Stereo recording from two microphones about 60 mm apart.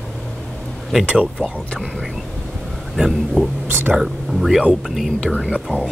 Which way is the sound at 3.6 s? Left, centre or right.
Right.